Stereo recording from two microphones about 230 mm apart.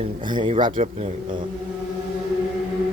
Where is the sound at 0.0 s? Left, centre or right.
Centre.